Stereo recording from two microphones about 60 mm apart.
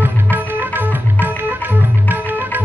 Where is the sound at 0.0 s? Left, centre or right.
Right.